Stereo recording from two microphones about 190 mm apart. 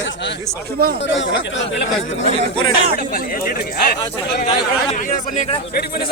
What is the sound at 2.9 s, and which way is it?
Speech, 50° left (ahead or behind).